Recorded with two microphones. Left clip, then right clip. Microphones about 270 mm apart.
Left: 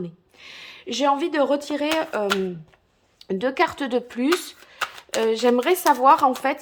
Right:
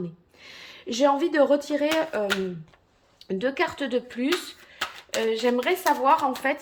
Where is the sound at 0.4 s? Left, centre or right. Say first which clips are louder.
Left 2 dB; centre.